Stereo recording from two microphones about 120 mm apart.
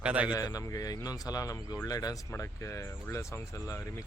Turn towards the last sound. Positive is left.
turn(degrees=25)  # may be behind; listen again after turning